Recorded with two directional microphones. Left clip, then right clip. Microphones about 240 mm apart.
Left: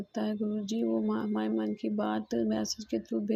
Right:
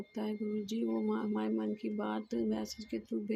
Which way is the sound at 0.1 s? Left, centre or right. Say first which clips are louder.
Left 5 dB; centre.